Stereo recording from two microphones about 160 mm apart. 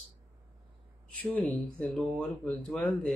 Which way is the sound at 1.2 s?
10° left (ahead or behind).